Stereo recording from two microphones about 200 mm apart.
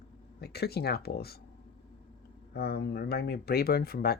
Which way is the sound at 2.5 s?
55° left (ahead or behind).